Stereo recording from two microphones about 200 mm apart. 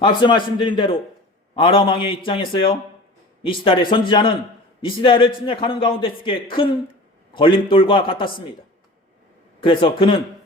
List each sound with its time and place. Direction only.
0.0 s a man's voice: 25° left (ahead or behind)
9.6 s a man's voice: 25° left (ahead or behind)